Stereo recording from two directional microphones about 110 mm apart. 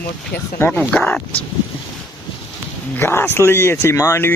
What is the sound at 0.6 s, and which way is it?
Speech, 10° left (ahead or behind).